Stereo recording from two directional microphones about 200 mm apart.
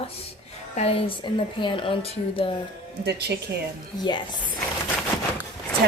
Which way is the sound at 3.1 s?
55° right (ahead or behind).